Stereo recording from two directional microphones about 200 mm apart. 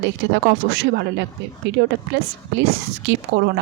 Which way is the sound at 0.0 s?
55° right (ahead or behind).